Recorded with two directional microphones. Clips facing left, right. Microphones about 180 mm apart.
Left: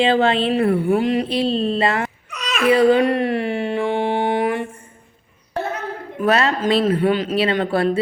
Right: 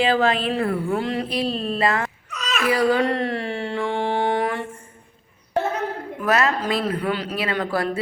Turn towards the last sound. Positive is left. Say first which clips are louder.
# left 5 dB
turn(degrees=25)  # may be behind; listen again after turning